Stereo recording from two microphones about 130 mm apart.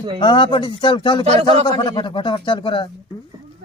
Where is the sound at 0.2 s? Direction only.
35° left (ahead or behind).